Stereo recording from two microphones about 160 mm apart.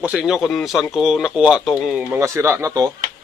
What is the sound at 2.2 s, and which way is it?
Speech, 15° right (ahead or behind).